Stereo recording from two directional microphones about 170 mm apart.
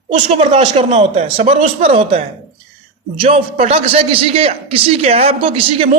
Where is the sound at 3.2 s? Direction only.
35° right (ahead or behind).